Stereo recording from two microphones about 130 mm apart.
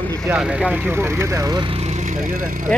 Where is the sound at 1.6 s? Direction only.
50° right (ahead or behind); by 2.7 s 90° right.